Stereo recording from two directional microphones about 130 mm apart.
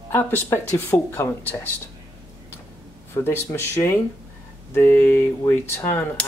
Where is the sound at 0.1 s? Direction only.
15° left (ahead or behind).